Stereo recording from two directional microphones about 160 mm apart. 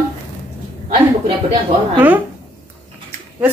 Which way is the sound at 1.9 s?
10° right (ahead or behind).